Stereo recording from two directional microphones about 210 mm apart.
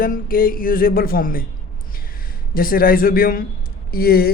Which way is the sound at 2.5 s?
45° left (ahead or behind).